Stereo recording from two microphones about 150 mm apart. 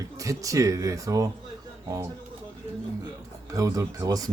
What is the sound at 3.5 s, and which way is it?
Speech, 25° right (ahead or behind).